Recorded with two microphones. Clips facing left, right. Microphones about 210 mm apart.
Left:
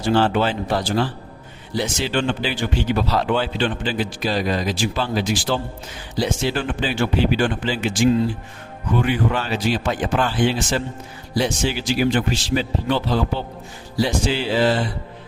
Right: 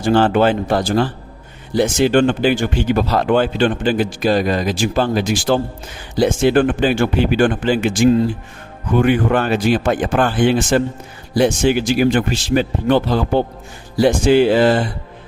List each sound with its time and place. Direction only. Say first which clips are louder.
0.0 s speech: right 5 dB; 50° right (ahead or behind)